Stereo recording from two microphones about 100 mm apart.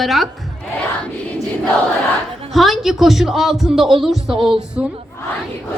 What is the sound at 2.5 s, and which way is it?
A man's voice, centre (ahead or behind).